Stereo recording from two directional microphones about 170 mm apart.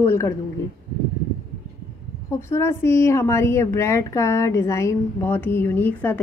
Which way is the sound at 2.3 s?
15° left (ahead or behind).